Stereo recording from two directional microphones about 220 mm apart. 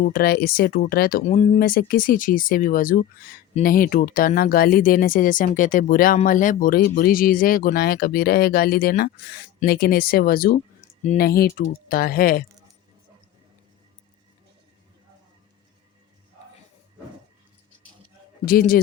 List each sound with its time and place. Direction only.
0.0 s speech: 45° left (ahead or behind)
1.2 s speech: 30° left (ahead or behind)
18.4 s speech: 40° left (ahead or behind)